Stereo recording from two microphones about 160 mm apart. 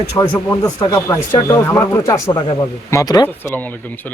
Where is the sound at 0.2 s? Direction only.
20° left (ahead or behind).